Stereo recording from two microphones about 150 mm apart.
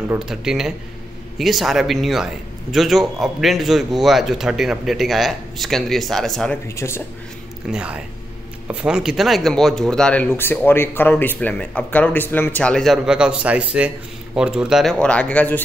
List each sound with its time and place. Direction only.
0.2 s speech: 5° right (ahead or behind)
6.8 s speech: 15° left (ahead or behind)
7.7 s speech: 5° right (ahead or behind); by 15.6 s 10° left (ahead or behind)